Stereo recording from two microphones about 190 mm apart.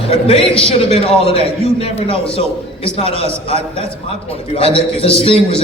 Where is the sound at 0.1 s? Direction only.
30° left (ahead or behind).